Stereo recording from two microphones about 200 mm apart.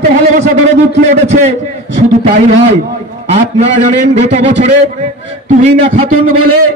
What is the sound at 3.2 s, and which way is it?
A man's voice, 30° right (ahead or behind).